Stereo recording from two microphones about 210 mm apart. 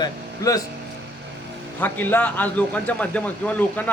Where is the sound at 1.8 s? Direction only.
10° left (ahead or behind).